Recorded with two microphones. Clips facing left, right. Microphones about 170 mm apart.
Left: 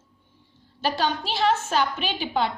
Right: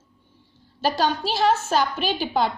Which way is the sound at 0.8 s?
40° right (ahead or behind).